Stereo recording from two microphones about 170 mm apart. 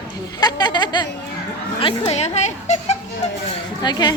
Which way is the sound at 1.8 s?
40° left (ahead or behind).